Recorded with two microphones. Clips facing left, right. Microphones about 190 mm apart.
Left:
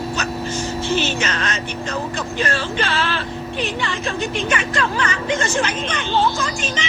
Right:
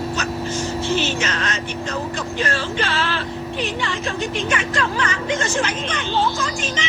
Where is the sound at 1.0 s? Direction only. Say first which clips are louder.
Even; 60° left (ahead or behind).